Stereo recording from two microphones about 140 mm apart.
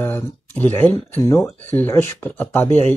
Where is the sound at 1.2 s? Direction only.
25° left (ahead or behind).